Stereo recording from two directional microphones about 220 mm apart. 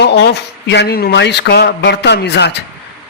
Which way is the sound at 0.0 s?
50° left (ahead or behind).